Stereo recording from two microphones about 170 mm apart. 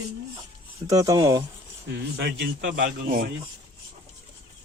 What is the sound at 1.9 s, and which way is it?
Speech, 80° right.